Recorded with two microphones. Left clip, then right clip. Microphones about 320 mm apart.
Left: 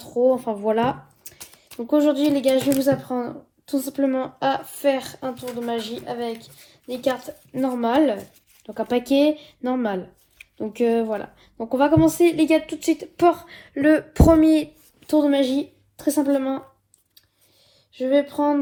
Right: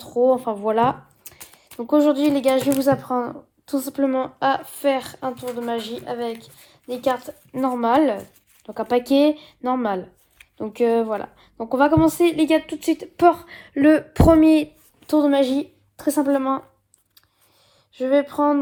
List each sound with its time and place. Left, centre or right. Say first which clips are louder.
0.2 s a woman's voice: right 1 dB; right
17.9 s speech: right 1 dB; right